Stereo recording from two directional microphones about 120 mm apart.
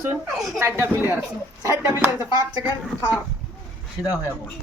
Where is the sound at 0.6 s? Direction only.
20° right (ahead or behind).